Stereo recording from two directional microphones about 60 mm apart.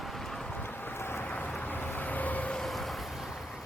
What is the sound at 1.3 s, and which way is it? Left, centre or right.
Vehicle, left.